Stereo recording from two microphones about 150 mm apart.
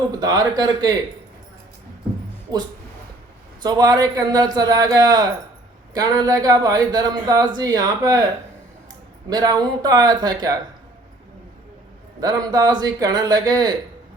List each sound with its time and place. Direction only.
0.1 s speech: 25° right (ahead or behind)
3.6 s speech: 25° right (ahead or behind)
9.3 s speech: 25° right (ahead or behind)
12.2 s speech: 25° right (ahead or behind)